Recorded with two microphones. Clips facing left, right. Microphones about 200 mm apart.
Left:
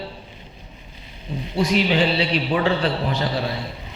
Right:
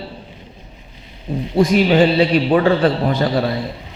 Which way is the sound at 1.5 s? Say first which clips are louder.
Right 6 dB; 50° right (ahead or behind).